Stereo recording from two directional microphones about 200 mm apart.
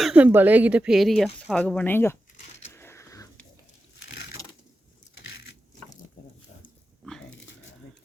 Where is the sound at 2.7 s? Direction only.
15° left (ahead or behind).